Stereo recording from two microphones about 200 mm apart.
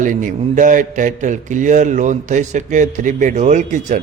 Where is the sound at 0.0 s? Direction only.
40° right (ahead or behind).